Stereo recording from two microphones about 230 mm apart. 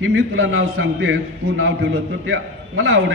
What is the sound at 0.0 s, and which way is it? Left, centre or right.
A man's voice, right.